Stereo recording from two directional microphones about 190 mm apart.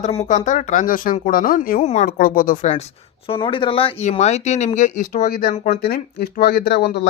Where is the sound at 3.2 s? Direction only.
30° left (ahead or behind).